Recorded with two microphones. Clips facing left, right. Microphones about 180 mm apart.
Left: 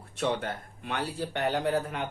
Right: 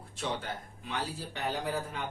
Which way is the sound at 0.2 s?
60° left (ahead or behind).